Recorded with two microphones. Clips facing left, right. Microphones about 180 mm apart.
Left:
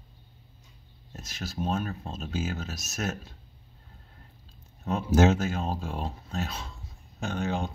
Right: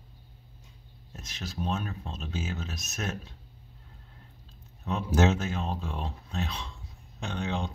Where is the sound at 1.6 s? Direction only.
45° left (ahead or behind).